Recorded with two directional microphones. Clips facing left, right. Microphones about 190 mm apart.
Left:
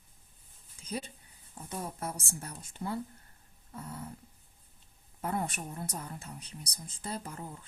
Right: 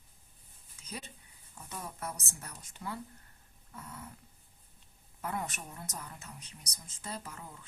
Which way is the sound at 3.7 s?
30° left (ahead or behind).